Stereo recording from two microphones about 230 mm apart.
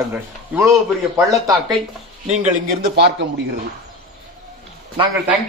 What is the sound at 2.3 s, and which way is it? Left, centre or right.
Speech, right.